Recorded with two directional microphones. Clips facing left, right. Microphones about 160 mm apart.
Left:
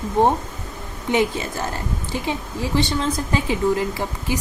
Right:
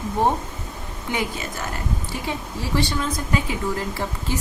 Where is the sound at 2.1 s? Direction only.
20° left (ahead or behind).